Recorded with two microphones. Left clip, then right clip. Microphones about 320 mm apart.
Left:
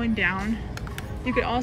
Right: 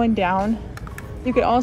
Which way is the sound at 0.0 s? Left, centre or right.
Centre.